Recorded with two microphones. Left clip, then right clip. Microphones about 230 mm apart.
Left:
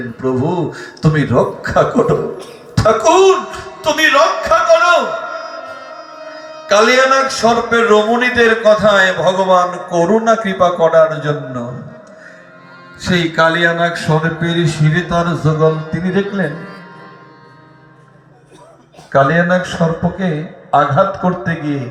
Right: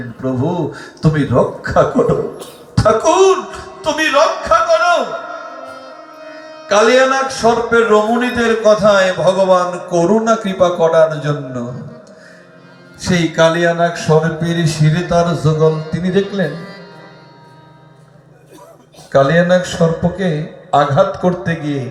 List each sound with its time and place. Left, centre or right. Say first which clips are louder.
0.2 s a man's voice: left 2 dB; left
2.7 s a sound: left 1 dB; left
8.4 s a man's voice: left 1 dB; left; by 11.7 s centre
13.0 s a man's voice: even; centre
14.3 s a man's voice: left 2 dB; centre
14.8 s a man's voice: right 4 dB; right
19.1 s a man's voice: right 1 dB; right